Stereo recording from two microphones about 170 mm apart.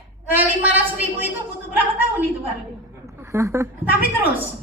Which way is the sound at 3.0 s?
15° right (ahead or behind).